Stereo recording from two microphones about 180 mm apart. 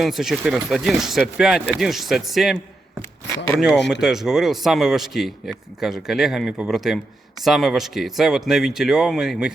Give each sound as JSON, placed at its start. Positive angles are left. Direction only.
{"t": 0.0, "sound": "a man's voice", "side_deg": 0}
{"t": 3.8, "sound": "speech", "side_deg": 75}
{"t": 4.0, "sound": "a man's voice", "side_deg": 0}